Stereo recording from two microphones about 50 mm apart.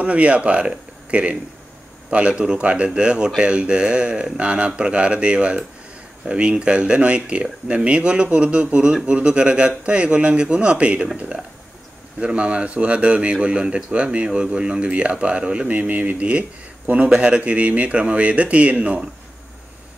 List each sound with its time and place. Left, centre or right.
0.0 s speech: right
12.2 s speech: right
15.7 s speech: right